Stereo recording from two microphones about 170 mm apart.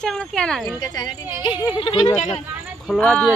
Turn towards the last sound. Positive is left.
turn(degrees=5)  # may be behind; listen again after turning